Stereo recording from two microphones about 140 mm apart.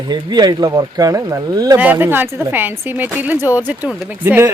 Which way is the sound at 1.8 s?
15° right (ahead or behind).